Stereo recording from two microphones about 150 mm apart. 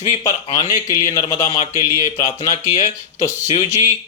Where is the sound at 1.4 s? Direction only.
45° left (ahead or behind).